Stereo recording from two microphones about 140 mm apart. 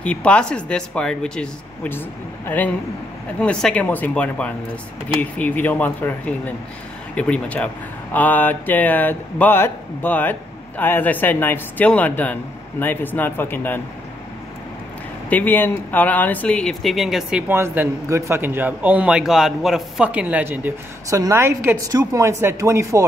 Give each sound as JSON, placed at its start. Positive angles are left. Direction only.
{"t": 0.0, "sound": "speech", "side_deg": 10}
{"t": 15.2, "sound": "speech", "side_deg": 10}
{"t": 17.5, "sound": "a man's voice", "side_deg": -15}